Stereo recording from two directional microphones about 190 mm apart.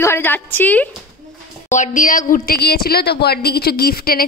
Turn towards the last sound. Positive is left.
turn(degrees=50)  # may be behind; listen again after turning